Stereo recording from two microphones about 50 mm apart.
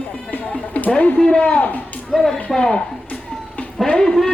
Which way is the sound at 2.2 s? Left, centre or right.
Centre.